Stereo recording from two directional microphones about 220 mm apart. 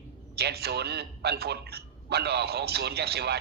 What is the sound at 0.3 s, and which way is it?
A man's voice, 45° right (ahead or behind).